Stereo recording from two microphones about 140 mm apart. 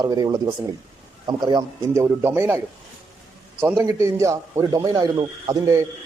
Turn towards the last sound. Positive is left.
turn(degrees=-20)  # may be behind; listen again after turning